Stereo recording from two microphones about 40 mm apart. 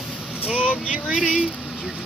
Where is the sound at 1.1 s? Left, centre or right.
Centre.